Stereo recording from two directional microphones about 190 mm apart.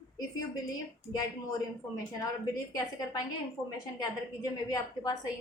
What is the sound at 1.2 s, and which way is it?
Speech, 20° left (ahead or behind).